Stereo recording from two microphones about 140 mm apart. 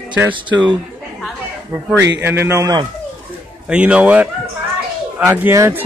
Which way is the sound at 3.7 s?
10° right (ahead or behind).